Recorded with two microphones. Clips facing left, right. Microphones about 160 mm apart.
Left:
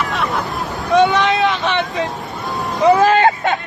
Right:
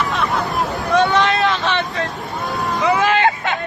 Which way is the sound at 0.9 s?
20° left (ahead or behind).